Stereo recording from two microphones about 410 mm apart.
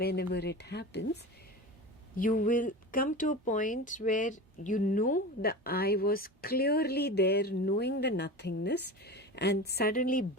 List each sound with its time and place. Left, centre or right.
0.0 s speech: left